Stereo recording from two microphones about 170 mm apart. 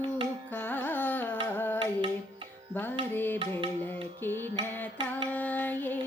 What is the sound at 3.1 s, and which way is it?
Music, 10° left (ahead or behind).